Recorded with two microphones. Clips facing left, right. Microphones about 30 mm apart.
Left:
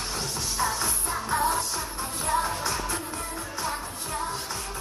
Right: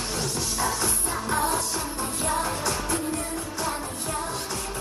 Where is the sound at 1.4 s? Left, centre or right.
Right.